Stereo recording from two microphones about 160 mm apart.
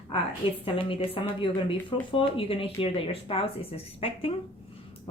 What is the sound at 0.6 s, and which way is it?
A woman's voice, 35° left (ahead or behind).